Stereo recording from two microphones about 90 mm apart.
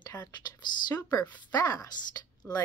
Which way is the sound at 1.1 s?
45° left (ahead or behind).